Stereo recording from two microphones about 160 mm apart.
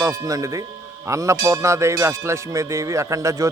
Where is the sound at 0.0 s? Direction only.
20° right (ahead or behind).